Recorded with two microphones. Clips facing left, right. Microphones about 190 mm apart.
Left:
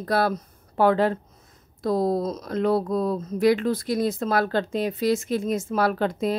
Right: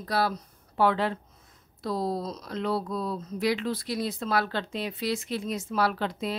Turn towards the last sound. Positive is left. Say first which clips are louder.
# left 5 dB
turn(degrees=50)  # may be behind; listen again after turning